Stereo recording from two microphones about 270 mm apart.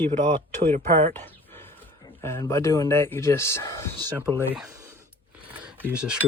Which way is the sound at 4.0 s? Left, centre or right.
Centre.